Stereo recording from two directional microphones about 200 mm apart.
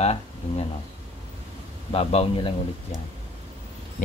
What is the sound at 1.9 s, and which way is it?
Speech, 30° left (ahead or behind).